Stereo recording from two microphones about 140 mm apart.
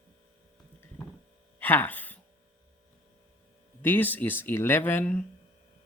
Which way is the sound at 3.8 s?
15° left (ahead or behind).